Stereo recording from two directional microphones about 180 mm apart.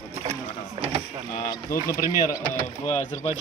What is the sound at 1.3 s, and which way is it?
Speech, 55° left (ahead or behind).